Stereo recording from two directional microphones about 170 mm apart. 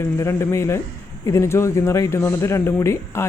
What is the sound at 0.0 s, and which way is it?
Speech, 15° left (ahead or behind).